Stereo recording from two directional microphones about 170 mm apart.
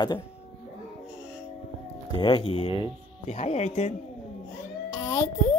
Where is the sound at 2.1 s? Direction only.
30° left (ahead or behind).